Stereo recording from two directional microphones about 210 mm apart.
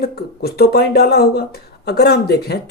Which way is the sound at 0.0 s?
50° left (ahead or behind).